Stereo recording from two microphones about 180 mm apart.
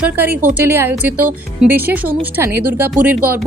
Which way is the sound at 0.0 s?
10° right (ahead or behind).